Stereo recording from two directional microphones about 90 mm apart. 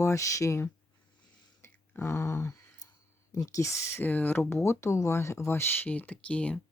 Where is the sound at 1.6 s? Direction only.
30° left (ahead or behind).